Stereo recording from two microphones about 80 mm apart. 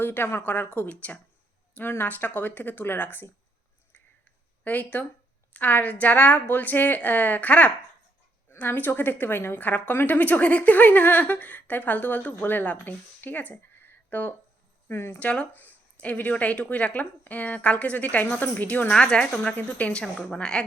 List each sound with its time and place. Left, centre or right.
0.0 s a woman's voice: left
4.6 s a woman's voice: left
15.2 s speech: centre